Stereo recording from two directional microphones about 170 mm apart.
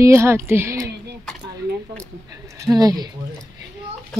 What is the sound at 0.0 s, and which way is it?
Speech, 15° right (ahead or behind).